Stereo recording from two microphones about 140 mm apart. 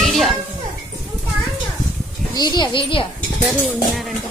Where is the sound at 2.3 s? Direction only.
30° left (ahead or behind).